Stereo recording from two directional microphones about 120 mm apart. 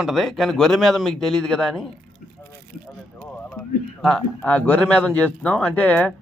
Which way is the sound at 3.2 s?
10° left (ahead or behind).